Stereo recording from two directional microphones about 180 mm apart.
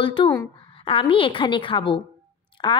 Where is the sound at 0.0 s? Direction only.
30° left (ahead or behind).